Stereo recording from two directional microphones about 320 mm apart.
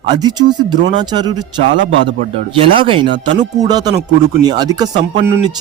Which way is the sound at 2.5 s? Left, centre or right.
Centre.